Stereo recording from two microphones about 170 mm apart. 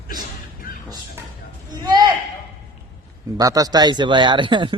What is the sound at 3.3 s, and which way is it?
Speech, 20° right (ahead or behind).